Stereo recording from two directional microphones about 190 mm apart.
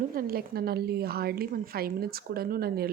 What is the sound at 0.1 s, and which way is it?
A woman's voice, 50° right (ahead or behind).